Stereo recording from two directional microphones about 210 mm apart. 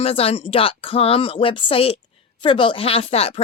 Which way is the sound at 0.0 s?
25° left (ahead or behind).